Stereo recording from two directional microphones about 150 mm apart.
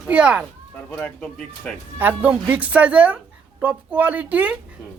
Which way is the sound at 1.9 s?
10° right (ahead or behind).